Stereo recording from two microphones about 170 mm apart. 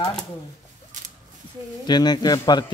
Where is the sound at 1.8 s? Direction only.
25° left (ahead or behind).